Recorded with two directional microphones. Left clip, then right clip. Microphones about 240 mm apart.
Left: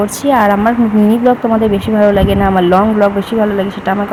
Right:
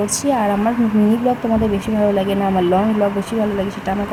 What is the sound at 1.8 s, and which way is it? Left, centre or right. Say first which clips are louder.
Speech: left 7 dB; centre.